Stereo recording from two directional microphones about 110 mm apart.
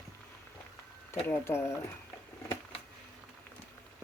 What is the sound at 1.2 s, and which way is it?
Speech, 25° left (ahead or behind).